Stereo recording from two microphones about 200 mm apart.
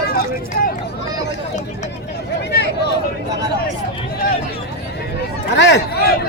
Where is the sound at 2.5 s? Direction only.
55° left (ahead or behind).